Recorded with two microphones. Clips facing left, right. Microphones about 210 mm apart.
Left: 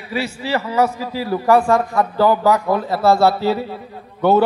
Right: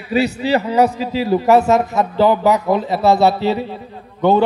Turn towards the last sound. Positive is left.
turn(degrees=-15)  # may be behind; listen again after turning